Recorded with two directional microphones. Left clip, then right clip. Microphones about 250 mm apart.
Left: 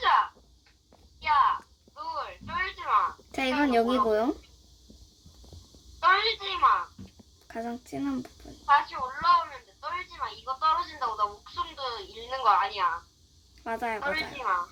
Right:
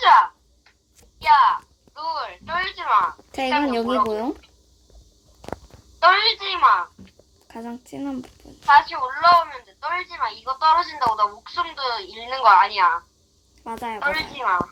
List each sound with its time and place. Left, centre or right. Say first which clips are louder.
0.0 s a sound: right 10 dB; right
3.8 s speech: right 2 dB; centre
6.0 s a woman's voice: right 7 dB; right
7.4 s speech: even; centre
8.6 s a woman's voice: right 8 dB; right
13.7 s speech: right 1 dB; centre
14.0 s a woman's voice: right 7 dB; right